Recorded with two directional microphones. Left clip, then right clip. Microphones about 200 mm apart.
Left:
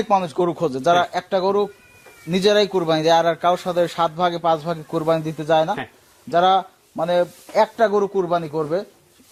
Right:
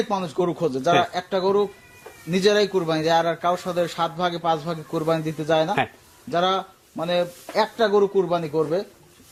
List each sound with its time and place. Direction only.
0.1 s a man's voice: 50° left (ahead or behind)